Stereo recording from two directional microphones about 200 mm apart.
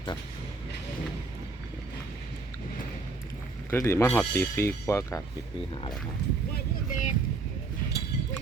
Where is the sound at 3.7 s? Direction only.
10° left (ahead or behind).